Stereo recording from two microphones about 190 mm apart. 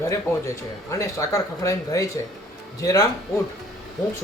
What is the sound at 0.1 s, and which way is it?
Speech, 15° left (ahead or behind).